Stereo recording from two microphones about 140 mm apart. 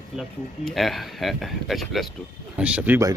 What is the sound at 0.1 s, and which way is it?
Speech, centre (ahead or behind).